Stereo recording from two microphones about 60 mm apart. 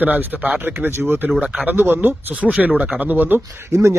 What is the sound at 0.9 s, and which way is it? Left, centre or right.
Speech, right.